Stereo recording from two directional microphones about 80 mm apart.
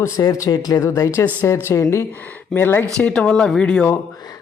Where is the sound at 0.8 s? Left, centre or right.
Left.